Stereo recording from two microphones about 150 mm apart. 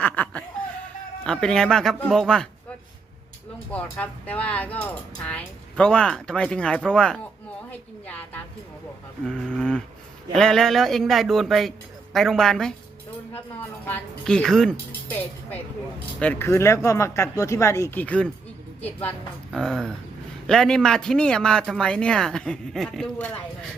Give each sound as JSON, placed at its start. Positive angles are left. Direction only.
{"t": 0.0, "sound": "chuckle", "side_deg": 10}
{"t": 1.2, "sound": "speech", "side_deg": 5}
{"t": 3.7, "sound": "speech", "side_deg": 10}
{"t": 13.8, "sound": "speech", "side_deg": 10}
{"t": 19.5, "sound": "speech", "side_deg": 5}